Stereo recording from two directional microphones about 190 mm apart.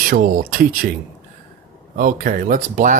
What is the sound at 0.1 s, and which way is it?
Speech, 50° right (ahead or behind).